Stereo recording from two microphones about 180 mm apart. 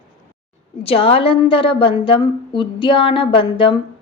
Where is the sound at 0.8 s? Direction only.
30° left (ahead or behind).